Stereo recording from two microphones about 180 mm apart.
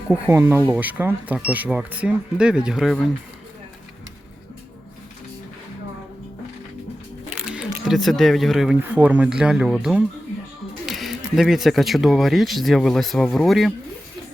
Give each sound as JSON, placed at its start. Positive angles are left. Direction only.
{"t": 0.1, "sound": "speech", "side_deg": -10}
{"t": 7.4, "sound": "speech", "side_deg": -5}